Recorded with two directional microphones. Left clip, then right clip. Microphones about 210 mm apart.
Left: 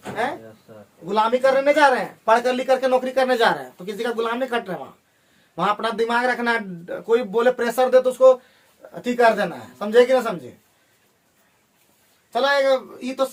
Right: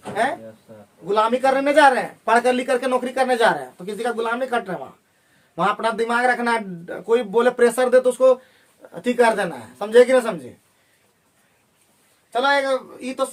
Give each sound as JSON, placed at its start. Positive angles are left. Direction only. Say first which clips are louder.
{"t": 1.0, "sound": "a man's voice", "louder": "even", "side_deg": -30}
{"t": 12.3, "sound": "speech", "louder": "left 1 dB", "side_deg": -20}